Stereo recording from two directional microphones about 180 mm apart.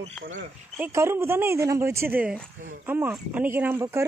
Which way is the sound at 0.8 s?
15° right (ahead or behind).